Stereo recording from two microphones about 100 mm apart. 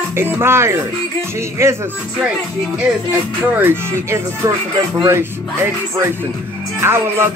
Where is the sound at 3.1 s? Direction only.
20° right (ahead or behind).